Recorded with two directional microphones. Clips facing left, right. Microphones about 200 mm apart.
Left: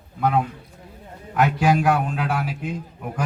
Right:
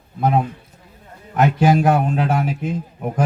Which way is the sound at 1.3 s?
40° right (ahead or behind).